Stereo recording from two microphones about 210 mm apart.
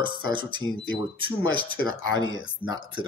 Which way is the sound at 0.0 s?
20° right (ahead or behind).